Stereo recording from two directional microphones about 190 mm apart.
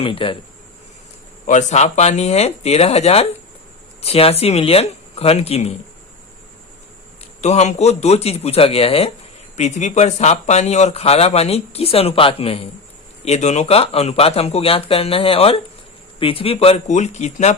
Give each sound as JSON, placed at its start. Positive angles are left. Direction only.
{"t": 0.0, "sound": "speech", "side_deg": 25}
{"t": 1.5, "sound": "speech", "side_deg": 40}
{"t": 7.4, "sound": "speech", "side_deg": 35}